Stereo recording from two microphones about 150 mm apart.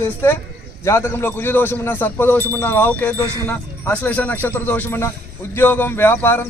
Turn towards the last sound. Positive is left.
turn(degrees=15)  # may be behind; listen again after turning